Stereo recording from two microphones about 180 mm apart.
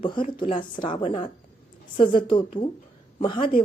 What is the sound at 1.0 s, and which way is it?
Speech, 40° left (ahead or behind).